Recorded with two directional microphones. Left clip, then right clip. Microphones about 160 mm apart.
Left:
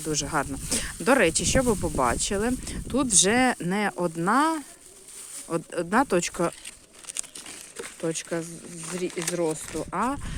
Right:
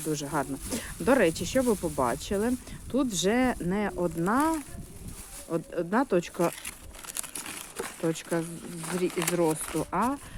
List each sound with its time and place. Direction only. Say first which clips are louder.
0.1 s speech: left 3 dB; 40° left (ahead or behind)
8.0 s speech: left 1 dB; 25° left (ahead or behind)
9.0 s speech: right 1 dB; 25° right (ahead or behind)
9.3 s speech: even; 15° left (ahead or behind)
9.7 s speech: even; 30° left (ahead or behind)